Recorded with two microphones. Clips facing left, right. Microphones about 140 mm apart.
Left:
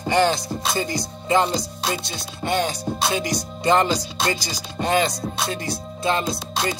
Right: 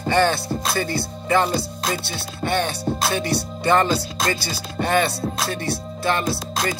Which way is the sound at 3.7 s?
20° left (ahead or behind).